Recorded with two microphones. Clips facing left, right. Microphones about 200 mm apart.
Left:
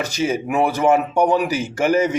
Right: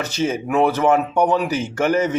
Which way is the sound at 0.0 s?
10° left (ahead or behind).